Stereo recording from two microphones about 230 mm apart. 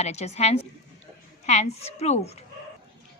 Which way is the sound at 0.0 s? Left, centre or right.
Left.